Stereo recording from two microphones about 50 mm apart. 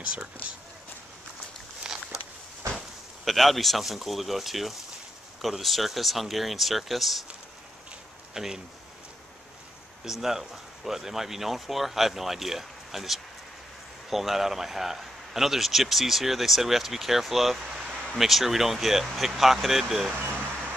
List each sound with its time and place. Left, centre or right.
0.0 s speech: right
1.8 s a sound: centre
3.3 s a man's voice: centre
8.3 s speech: centre
10.2 s a man's voice: centre